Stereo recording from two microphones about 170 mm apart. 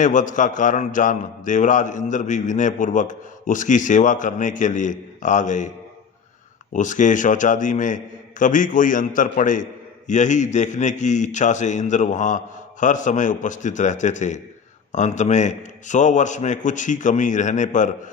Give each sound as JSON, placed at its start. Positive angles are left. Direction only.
{"t": 0.0, "sound": "a man's voice", "side_deg": 50}
{"t": 6.7, "sound": "a man's voice", "side_deg": 45}